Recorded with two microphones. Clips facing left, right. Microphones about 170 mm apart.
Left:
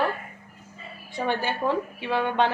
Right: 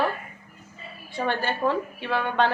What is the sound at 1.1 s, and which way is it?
A woman's voice, 15° left (ahead or behind).